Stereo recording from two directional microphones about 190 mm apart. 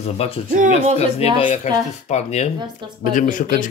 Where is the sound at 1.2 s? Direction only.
30° left (ahead or behind).